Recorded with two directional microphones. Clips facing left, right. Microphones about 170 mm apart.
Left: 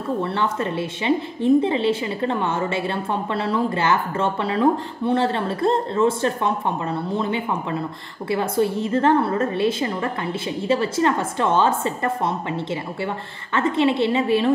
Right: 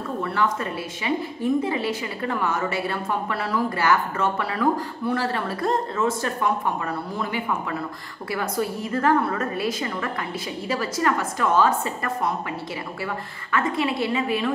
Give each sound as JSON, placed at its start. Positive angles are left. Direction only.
{"t": 0.2, "sound": "a woman's voice", "side_deg": 25}